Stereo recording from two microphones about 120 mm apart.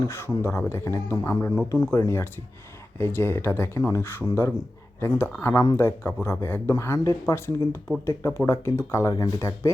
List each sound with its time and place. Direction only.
0.0 s speech: 20° left (ahead or behind)